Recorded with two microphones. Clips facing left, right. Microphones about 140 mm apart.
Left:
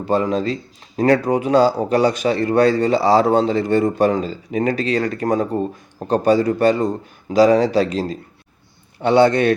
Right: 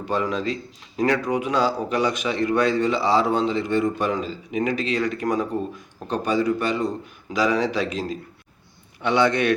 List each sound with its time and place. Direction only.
0.1 s a man's voice: 35° left (ahead or behind)